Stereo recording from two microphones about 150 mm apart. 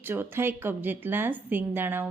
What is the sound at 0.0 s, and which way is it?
A woman's voice, 15° right (ahead or behind).